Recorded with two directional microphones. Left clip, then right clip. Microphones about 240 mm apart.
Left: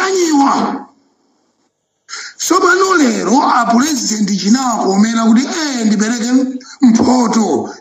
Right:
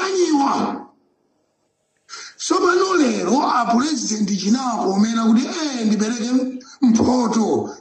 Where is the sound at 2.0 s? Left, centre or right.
Left.